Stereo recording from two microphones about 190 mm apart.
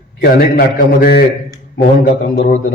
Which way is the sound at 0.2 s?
55° left (ahead or behind).